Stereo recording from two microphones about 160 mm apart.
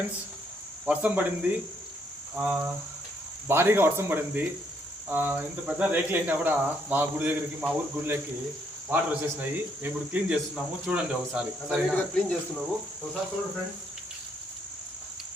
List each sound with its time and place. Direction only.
0.9 s a man's voice: 10° right (ahead or behind)